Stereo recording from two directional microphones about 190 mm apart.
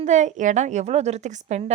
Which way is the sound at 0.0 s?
40° right (ahead or behind).